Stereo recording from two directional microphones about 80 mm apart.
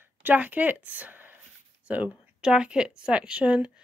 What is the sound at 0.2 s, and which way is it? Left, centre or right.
A woman's voice, right.